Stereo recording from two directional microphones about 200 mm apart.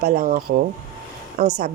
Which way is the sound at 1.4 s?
55° right (ahead or behind).